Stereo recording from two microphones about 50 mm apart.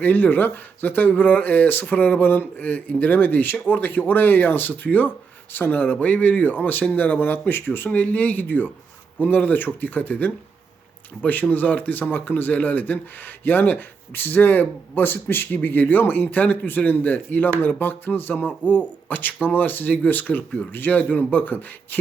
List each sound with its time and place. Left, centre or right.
0.0 s speech: left
7.9 s speech: left